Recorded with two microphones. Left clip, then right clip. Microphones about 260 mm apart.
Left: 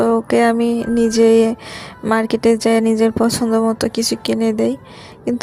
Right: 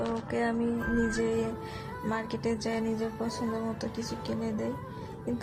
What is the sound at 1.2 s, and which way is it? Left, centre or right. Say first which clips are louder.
Speech: left 18 dB; left.